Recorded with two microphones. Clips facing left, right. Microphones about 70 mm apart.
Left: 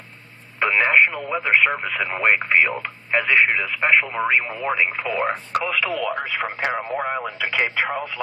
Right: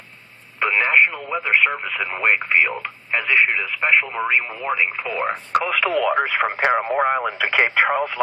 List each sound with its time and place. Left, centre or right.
0.6 s speech: centre
5.9 s speech: right
6.3 s speech: right
7.5 s speech: right